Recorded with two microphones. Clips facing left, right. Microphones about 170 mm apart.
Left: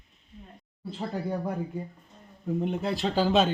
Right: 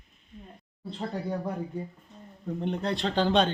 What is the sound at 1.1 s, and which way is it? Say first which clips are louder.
Speech: left 2 dB; 5° left (ahead or behind).